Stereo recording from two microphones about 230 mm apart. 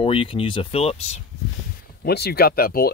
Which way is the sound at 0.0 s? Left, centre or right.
Left.